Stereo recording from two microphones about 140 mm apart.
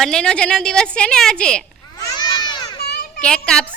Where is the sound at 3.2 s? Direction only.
5° left (ahead or behind).